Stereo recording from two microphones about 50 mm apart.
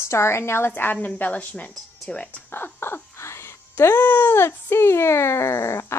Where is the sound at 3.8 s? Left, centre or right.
Left.